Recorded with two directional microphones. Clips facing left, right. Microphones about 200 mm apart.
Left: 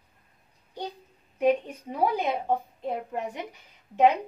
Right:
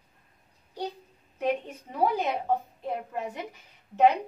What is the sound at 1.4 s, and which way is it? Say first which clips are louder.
Speech: left 5 dB; 15° left (ahead or behind).